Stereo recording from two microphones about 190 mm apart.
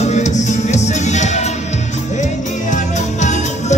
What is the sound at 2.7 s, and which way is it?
Music, 40° left (ahead or behind).